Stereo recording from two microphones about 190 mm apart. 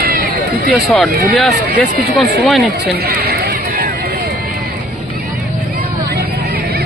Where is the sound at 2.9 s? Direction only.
55° right (ahead or behind).